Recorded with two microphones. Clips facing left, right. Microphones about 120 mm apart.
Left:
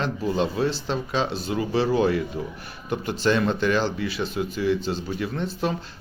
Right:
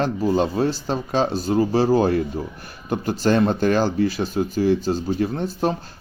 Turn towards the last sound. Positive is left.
turn(degrees=-40)  # may be behind; listen again after turning